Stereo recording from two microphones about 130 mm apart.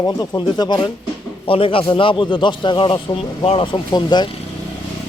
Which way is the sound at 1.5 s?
45° left (ahead or behind).